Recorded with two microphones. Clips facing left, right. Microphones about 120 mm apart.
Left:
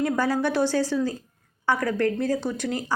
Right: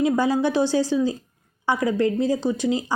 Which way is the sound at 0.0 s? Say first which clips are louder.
Right 3 dB; 15° right (ahead or behind).